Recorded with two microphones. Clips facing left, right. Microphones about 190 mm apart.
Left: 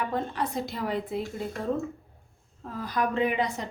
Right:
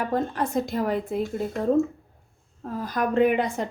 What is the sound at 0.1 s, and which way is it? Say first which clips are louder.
A woman's voice: right 5 dB; 45° right (ahead or behind).